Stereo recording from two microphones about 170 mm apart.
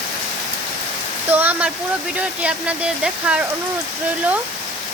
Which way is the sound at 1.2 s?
10° right (ahead or behind).